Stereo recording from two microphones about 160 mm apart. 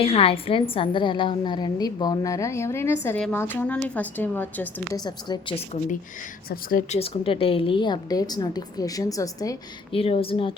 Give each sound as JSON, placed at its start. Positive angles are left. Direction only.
{"t": 0.0, "sound": "a woman's voice", "side_deg": 35}
{"t": 4.9, "sound": "a woman's voice", "side_deg": 25}
{"t": 6.5, "sound": "speech", "side_deg": 65}
{"t": 6.9, "sound": "a woman's voice", "side_deg": 40}
{"t": 9.9, "sound": "a woman's voice", "side_deg": 35}